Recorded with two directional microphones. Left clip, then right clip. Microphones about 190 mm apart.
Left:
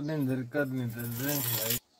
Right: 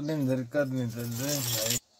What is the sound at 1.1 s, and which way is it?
Speech, centre (ahead or behind).